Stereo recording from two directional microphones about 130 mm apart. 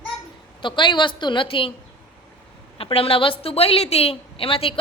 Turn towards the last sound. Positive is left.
turn(degrees=45)  # may be behind; listen again after turning